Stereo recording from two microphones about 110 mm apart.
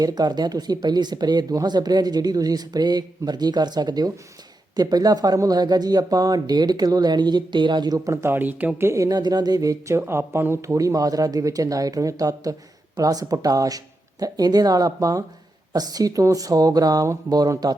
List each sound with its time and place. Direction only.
0.0 s speech: 40° right (ahead or behind)